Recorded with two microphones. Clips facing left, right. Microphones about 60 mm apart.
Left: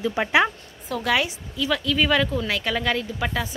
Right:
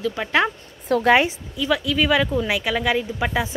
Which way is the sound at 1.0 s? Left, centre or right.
Right.